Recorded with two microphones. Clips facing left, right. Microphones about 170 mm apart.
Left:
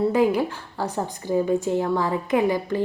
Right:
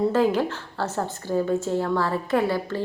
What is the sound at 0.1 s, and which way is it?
A woman's voice, 10° left (ahead or behind).